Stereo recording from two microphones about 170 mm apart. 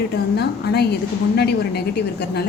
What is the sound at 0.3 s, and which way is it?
A woman's voice, 75° left (ahead or behind).